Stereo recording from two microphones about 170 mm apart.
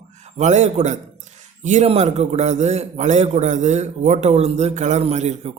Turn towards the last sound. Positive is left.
turn(degrees=-40)  # may be behind; listen again after turning